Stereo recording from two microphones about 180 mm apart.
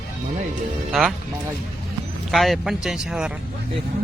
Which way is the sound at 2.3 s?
Centre (ahead or behind).